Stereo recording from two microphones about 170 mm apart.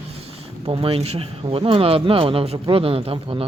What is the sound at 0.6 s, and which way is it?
Speech, 35° right (ahead or behind).